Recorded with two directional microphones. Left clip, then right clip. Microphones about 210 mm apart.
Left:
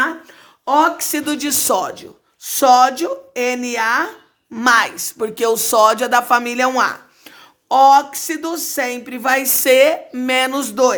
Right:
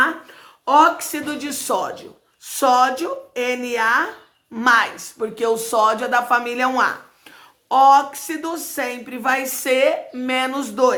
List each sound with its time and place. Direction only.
0.6 s a man's voice: 30° left (ahead or behind)